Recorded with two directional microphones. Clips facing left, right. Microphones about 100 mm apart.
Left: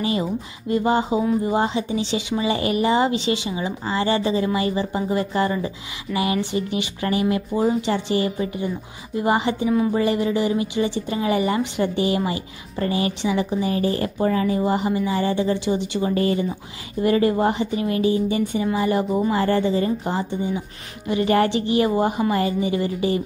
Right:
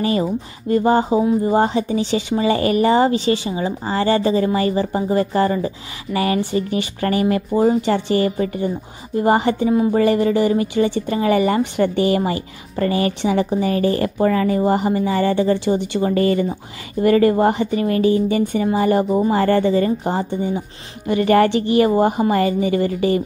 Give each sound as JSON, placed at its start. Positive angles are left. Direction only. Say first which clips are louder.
{"t": 0.0, "sound": "speech", "louder": "right 4 dB", "side_deg": -45}
{"t": 13.2, "sound": "a woman's voice", "louder": "right 4 dB", "side_deg": -55}
{"t": 14.1, "sound": "speech", "louder": "right 4 dB", "side_deg": -75}
{"t": 14.6, "sound": "a woman's voice", "louder": "right 4 dB", "side_deg": -50}
{"t": 19.4, "sound": "a woman's voice", "louder": "right 4 dB", "side_deg": -60}
{"t": 21.1, "sound": "a woman's voice", "louder": "right 4 dB", "side_deg": -60}
{"t": 21.9, "sound": "a woman's voice", "louder": "right 4 dB", "side_deg": -45}